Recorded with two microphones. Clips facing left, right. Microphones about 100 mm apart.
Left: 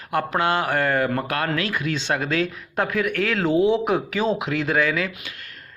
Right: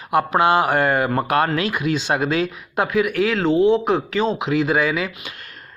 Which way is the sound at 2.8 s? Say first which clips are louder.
Right 4 dB; 5° right (ahead or behind).